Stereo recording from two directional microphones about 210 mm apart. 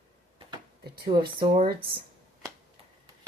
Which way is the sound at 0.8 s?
50° right (ahead or behind).